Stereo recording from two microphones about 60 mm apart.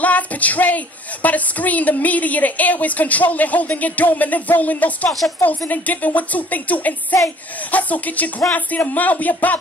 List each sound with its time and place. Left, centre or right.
0.0 s speech: left